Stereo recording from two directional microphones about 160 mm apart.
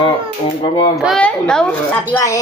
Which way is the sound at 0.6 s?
30° left (ahead or behind).